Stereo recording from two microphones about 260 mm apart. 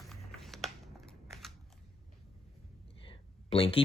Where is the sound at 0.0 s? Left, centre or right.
Centre.